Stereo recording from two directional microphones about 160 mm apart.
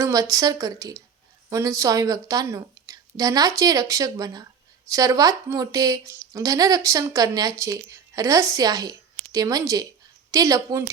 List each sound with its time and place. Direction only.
0.0 s speech: 20° right (ahead or behind)